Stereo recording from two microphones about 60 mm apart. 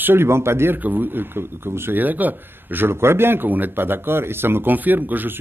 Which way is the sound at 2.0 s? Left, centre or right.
Right.